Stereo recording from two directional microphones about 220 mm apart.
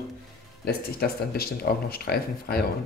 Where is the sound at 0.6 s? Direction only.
45° left (ahead or behind).